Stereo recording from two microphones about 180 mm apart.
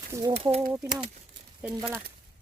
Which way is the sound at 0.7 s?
10° right (ahead or behind).